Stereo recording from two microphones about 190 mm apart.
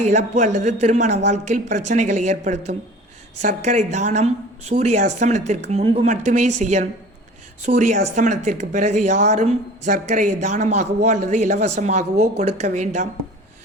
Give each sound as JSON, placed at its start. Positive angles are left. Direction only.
{"t": 0.0, "sound": "speech", "side_deg": -40}